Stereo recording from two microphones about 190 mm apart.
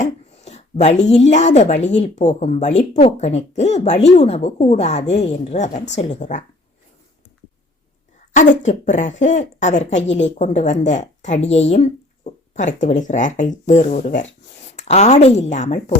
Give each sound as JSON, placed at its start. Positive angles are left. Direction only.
{"t": 0.0, "sound": "a woman's voice", "side_deg": 35}
{"t": 8.3, "sound": "speech", "side_deg": 40}